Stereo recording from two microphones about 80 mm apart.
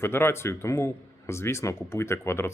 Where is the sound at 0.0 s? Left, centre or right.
Left.